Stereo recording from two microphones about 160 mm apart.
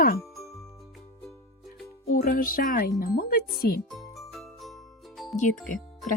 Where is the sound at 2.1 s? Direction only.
60° left (ahead or behind).